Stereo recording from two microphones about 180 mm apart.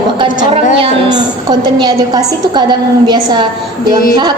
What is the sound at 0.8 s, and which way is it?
A woman's voice, 25° right (ahead or behind).